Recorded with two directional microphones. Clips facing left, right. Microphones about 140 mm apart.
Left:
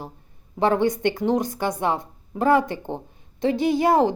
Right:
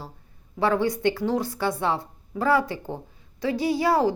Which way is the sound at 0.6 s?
20° left (ahead or behind).